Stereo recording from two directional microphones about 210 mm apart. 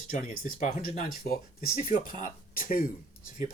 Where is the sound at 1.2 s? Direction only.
45° left (ahead or behind).